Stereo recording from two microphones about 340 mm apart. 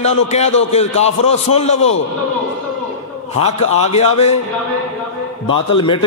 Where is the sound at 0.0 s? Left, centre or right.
Centre.